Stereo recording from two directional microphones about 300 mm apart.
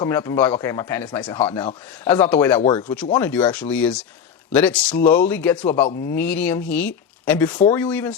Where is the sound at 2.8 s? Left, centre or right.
Centre.